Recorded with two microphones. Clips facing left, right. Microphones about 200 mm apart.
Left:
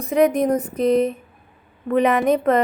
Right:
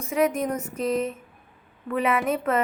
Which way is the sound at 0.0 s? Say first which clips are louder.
Left 6 dB; 35° left (ahead or behind).